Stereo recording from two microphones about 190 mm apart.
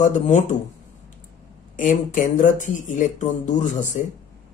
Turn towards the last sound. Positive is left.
turn(degrees=40)  # may be behind; listen again after turning